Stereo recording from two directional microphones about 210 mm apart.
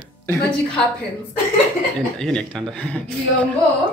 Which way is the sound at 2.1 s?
5° left (ahead or behind).